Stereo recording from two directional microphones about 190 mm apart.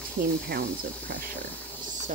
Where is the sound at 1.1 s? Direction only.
55° right (ahead or behind).